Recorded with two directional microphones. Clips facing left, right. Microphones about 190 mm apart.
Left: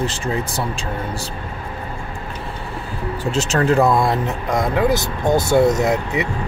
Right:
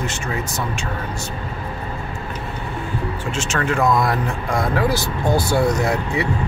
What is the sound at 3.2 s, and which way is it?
Speech, 35° left (ahead or behind).